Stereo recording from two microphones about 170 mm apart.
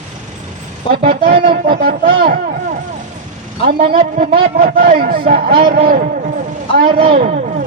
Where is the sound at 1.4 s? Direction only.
55° right (ahead or behind).